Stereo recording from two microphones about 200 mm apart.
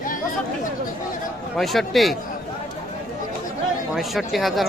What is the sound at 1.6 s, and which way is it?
Speech, centre (ahead or behind).